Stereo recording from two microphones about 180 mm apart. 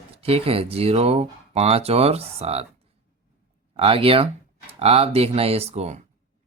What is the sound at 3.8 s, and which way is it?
Speech, 30° right (ahead or behind).